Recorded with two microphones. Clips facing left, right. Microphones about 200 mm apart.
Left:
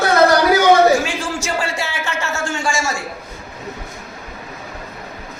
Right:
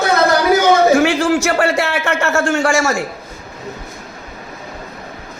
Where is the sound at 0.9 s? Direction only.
65° right (ahead or behind).